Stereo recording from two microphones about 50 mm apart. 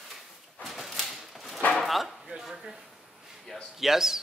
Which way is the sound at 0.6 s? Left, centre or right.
Centre.